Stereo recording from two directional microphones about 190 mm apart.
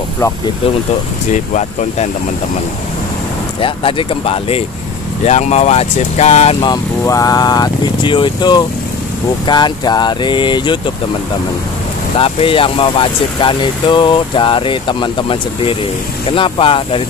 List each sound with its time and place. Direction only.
1.3 s speech: 35° left (ahead or behind)
3.6 s speech: 30° left (ahead or behind)
12.2 s speech: 30° left (ahead or behind)